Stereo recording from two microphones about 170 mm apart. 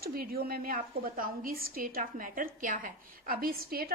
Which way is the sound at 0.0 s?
60° right (ahead or behind).